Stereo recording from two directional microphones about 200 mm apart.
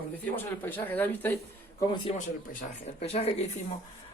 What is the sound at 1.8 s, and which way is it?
A man's voice, 25° left (ahead or behind).